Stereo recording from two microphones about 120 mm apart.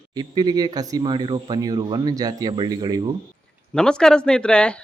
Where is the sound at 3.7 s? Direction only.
5° left (ahead or behind).